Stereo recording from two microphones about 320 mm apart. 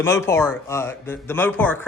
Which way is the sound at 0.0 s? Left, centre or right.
Centre.